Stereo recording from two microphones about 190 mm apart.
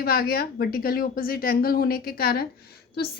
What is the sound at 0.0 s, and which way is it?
A woman's voice, 55° left (ahead or behind).